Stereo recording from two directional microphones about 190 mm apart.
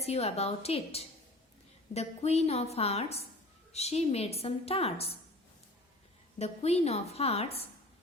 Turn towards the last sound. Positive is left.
turn(degrees=30)  # may be behind; listen again after turning